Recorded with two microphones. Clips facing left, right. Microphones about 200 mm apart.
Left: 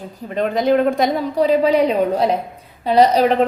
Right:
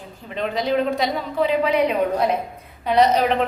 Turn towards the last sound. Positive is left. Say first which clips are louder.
# left 4 dB
turn(degrees=35)  # may be behind; listen again after turning